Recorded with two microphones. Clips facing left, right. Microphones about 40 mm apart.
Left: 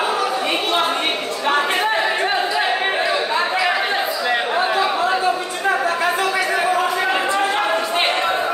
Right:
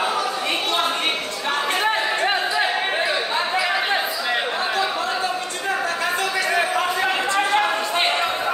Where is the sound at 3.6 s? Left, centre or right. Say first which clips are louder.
Left 2 dB; centre.